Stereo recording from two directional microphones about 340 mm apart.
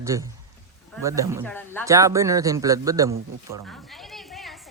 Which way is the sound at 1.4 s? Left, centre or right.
Centre.